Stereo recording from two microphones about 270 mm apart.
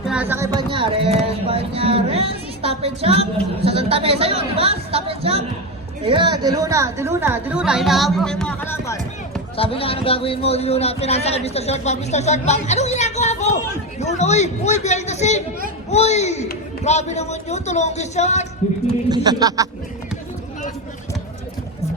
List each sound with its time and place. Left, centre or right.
0.1 s music: centre
3.6 s speech: right; by 18.4 s left
19.0 s speech: centre